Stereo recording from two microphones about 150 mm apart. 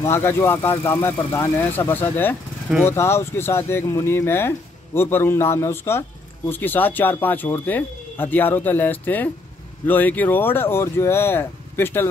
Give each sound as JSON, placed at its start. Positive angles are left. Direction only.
{"t": 0.0, "sound": "speech", "side_deg": 15}